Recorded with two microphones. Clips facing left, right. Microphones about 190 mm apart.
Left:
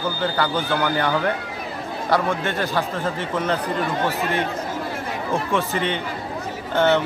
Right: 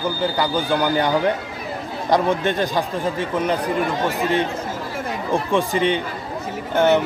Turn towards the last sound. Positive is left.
turn(degrees=-10)  # may be behind; listen again after turning